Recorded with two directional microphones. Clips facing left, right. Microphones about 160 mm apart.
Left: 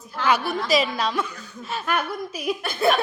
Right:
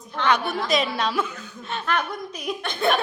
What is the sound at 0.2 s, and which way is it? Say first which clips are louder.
A woman's voice: even; 5° left (ahead or behind).